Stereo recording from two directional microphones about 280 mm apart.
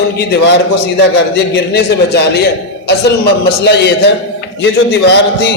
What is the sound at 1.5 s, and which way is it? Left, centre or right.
A man's voice, left.